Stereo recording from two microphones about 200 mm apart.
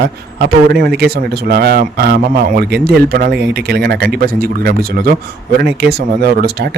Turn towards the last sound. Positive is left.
turn(degrees=-50)  # may be behind; listen again after turning